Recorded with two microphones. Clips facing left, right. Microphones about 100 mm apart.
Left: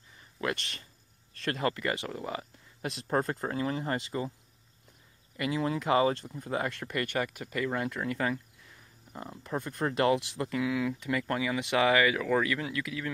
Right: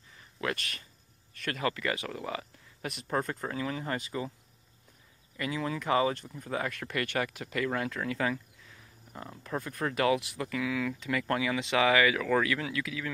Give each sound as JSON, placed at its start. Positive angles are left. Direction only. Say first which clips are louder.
{"t": 0.6, "sound": "speech", "louder": "right 1 dB", "side_deg": 25}
{"t": 5.4, "sound": "speech", "louder": "left 3 dB", "side_deg": 30}